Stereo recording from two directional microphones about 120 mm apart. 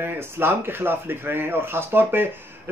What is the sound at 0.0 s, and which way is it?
A man's voice, 20° right (ahead or behind).